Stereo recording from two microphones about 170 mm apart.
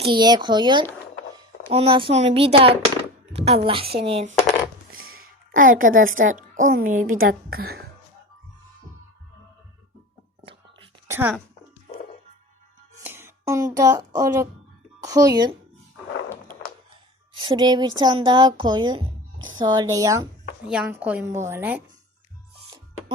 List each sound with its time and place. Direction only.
0.0 s speech: 25° right (ahead or behind)
5.2 s a woman's voice: 55° right (ahead or behind)
10.4 s whispering: 30° right (ahead or behind)
11.1 s speech: 15° right (ahead or behind)
13.0 s music: 15° right (ahead or behind)
13.7 s speech: 20° right (ahead or behind)
17.4 s speech: 25° right (ahead or behind)
20.7 s speech: 5° right (ahead or behind)